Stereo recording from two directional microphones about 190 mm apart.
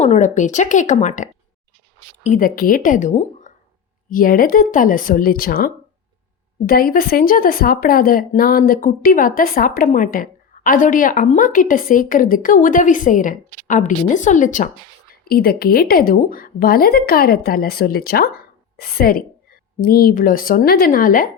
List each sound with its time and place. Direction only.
0.0 s speech: 40° left (ahead or behind)
15.2 s speech: 55° left (ahead or behind)